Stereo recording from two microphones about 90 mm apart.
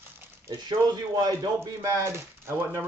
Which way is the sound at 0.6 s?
50° right (ahead or behind).